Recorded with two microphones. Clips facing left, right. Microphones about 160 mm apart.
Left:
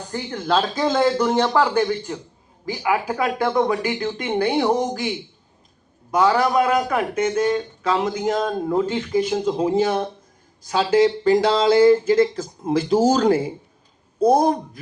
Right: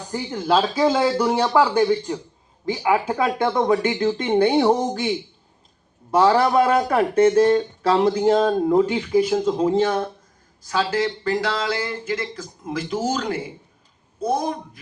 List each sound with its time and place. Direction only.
0.1 s speech: 10° right (ahead or behind)
6.1 s speech: 30° right (ahead or behind)
8.7 s speech: 15° right (ahead or behind); by 10.1 s 10° left (ahead or behind)
10.7 s speech: 20° left (ahead or behind); by 14.6 s 40° left (ahead or behind)